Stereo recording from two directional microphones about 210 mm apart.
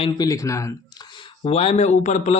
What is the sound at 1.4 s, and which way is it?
Speech, 30° left (ahead or behind).